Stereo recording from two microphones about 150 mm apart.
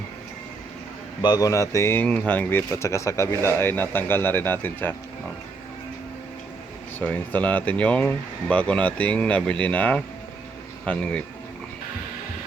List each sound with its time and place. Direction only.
1.2 s speech: 25° left (ahead or behind)
7.0 s speech: 10° left (ahead or behind)